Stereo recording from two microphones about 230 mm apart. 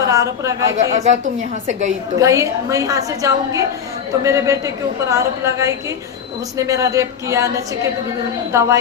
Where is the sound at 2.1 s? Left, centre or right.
Centre.